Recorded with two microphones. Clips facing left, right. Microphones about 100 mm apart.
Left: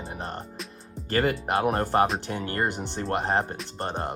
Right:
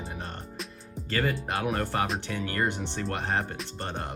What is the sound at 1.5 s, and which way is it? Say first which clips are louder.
Speech: left 5 dB; 35° left (ahead or behind).